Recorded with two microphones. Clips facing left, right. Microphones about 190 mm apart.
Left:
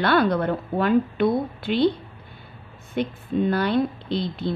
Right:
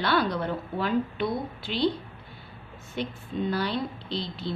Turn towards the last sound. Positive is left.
turn(degrees=55)  # may be behind; listen again after turning